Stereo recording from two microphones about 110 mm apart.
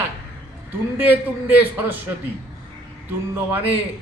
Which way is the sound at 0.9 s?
15° right (ahead or behind).